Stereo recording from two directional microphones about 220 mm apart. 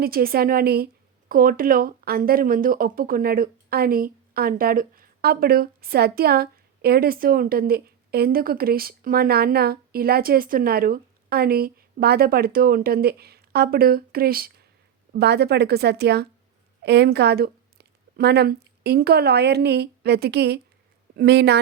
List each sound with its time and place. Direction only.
0.0 s a woman's voice: 40° right (ahead or behind)